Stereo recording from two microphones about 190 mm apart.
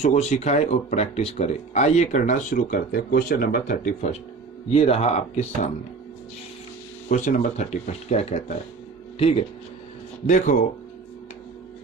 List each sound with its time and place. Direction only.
0.0 s speech: 35° left (ahead or behind)
4.7 s speech: 30° left (ahead or behind)
7.1 s speech: 40° left (ahead or behind)
10.2 s speech: 40° left (ahead or behind)